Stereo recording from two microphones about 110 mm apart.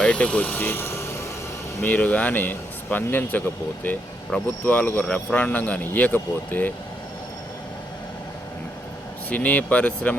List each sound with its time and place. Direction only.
0.0 s speech: 10° left (ahead or behind)
9.3 s speech: 15° left (ahead or behind)